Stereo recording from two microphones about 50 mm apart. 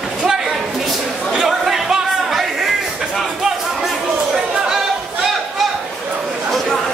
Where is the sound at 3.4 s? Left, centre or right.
Centre.